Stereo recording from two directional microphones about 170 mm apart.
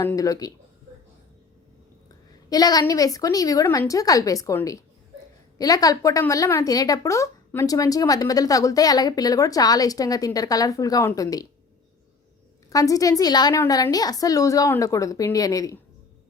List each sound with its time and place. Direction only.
0.0 s a woman's voice: 15° left (ahead or behind)
2.5 s a woman's voice: 20° left (ahead or behind)
12.7 s a woman's voice: 20° left (ahead or behind)